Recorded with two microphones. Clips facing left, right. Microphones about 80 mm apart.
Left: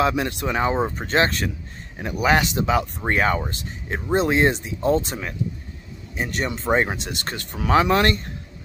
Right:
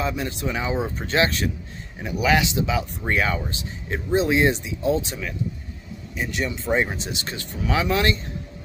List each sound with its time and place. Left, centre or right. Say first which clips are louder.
0.0 s speech: left 5 dB; left
0.8 s speech: left 1 dB; left
6.7 s speech: left 2 dB; left
7.0 s speech: left 1 dB; left